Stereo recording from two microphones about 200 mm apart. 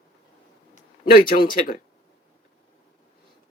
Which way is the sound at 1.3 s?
45° left (ahead or behind).